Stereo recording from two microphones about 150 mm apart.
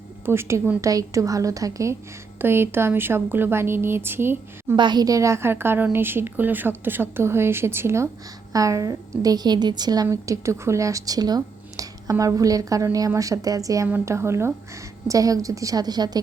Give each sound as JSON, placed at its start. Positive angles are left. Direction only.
{"t": 0.3, "sound": "a woman's voice", "side_deg": -15}
{"t": 4.8, "sound": "a woman's voice", "side_deg": -30}